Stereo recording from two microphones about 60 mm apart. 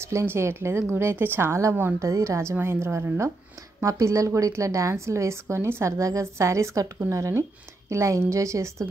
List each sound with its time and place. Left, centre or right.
0.0 s speech: right
2.0 s a woman's voice: right
2.6 s speech: right
3.8 s a woman's voice: right